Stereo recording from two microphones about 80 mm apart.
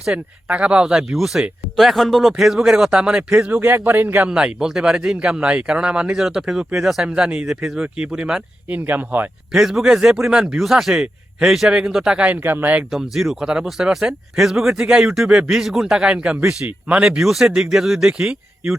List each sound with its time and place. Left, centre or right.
0.1 s speech: centre
3.3 s a man's voice: right
4.3 s speech: centre
8.7 s a man's voice: right
9.5 s speech: centre; by 12.8 s right
12.9 s speech: centre